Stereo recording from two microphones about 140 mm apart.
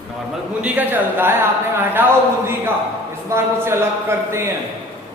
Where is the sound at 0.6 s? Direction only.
10° right (ahead or behind).